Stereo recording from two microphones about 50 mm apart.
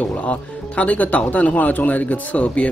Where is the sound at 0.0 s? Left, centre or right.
Left.